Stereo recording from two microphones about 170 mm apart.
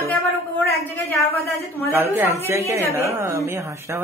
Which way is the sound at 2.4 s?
15° right (ahead or behind).